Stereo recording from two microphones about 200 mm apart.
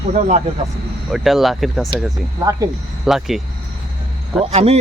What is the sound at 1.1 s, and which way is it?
Speech, centre (ahead or behind).